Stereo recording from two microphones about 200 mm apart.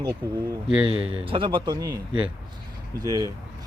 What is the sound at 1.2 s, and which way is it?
Speech, 25° right (ahead or behind).